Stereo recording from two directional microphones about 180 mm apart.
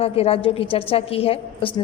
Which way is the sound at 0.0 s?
30° left (ahead or behind).